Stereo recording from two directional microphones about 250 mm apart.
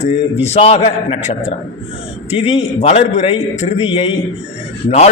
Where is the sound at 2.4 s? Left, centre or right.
Left.